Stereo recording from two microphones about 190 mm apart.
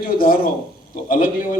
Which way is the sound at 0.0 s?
50° left (ahead or behind).